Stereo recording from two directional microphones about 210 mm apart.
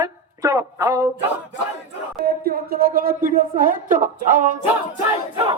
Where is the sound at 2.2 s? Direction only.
45° right (ahead or behind).